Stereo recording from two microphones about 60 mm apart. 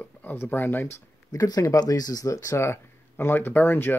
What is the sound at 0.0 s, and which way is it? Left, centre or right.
Speech, left.